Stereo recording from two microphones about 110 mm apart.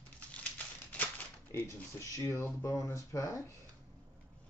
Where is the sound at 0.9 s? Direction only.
15° left (ahead or behind).